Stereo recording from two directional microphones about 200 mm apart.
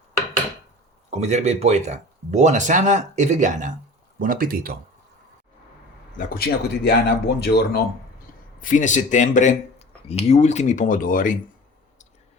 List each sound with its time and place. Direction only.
1.1 s speech: 35° right (ahead or behind)
6.1 s speech: 50° left (ahead or behind)
8.6 s speech: 40° left (ahead or behind)